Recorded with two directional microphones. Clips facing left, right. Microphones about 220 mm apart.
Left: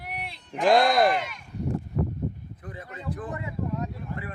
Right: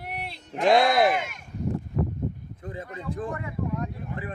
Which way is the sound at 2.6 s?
25° right (ahead or behind).